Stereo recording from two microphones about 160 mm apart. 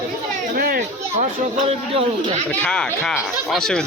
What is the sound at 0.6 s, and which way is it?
Speech, 65° right (ahead or behind).